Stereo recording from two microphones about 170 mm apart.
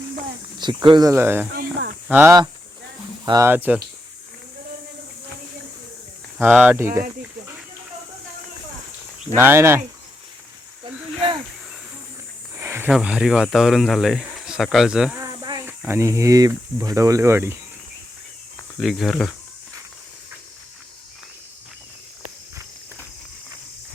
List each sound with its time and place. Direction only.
0.6 s speech: 25° right (ahead or behind)
1.5 s snake: 60° right (ahead or behind)
2.0 s speech: 10° right (ahead or behind)
6.4 s speech: 10° right (ahead or behind)
9.3 s speech: 15° right (ahead or behind)
12.5 s snake: 15° right (ahead or behind)
12.9 s speech: 5° right (ahead or behind)
15.2 s snake: 20° right (ahead or behind)
15.9 s speech: 15° right (ahead or behind)
18.8 s speech: centre (ahead or behind)